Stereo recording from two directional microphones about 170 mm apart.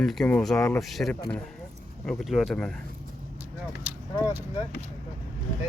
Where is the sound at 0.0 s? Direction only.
Centre (ahead or behind).